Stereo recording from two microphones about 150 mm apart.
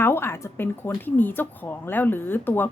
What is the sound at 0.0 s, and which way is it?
Speech, 15° left (ahead or behind).